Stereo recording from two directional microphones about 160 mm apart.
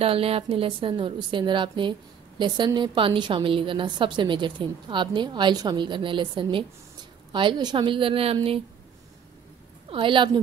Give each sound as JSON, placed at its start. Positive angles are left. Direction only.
{"t": 0.0, "sound": "a woman's voice", "side_deg": -35}
{"t": 9.8, "sound": "a woman's voice", "side_deg": -35}